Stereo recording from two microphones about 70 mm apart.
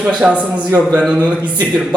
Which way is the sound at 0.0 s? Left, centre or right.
Centre.